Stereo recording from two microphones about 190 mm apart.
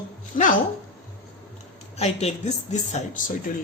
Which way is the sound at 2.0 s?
35° left (ahead or behind).